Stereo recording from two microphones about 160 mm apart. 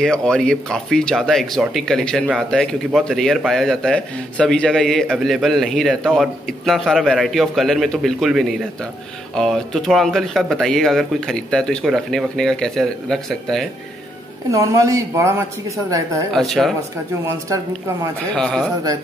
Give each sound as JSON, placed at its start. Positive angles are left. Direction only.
{"t": 0.0, "sound": "a man's voice", "side_deg": 5}
{"t": 14.5, "sound": "speech", "side_deg": -20}
{"t": 16.3, "sound": "a man's voice", "side_deg": 0}
{"t": 17.2, "sound": "speech", "side_deg": -20}
{"t": 18.3, "sound": "a man's voice", "side_deg": 5}